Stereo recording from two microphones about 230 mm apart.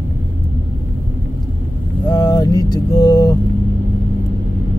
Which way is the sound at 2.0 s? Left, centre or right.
Centre.